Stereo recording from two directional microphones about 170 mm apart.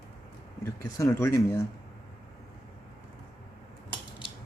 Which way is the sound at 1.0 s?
15° left (ahead or behind).